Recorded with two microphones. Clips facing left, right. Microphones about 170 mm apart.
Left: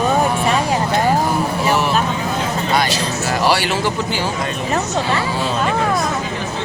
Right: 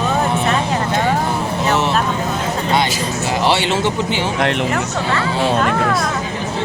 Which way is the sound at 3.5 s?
25° right (ahead or behind).